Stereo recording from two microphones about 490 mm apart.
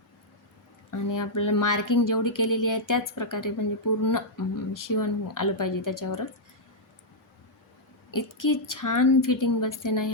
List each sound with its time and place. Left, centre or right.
0.9 s speech: left
8.1 s speech: left